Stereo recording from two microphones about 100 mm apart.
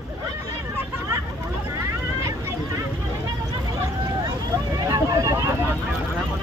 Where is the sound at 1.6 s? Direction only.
30° right (ahead or behind).